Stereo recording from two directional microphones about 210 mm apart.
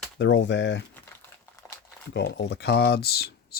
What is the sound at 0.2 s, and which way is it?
Speech, 60° left (ahead or behind).